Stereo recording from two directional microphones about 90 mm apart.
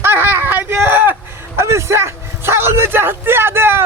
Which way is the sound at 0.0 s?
25° right (ahead or behind).